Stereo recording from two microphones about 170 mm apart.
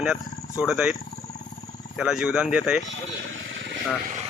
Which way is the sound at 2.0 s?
5° right (ahead or behind).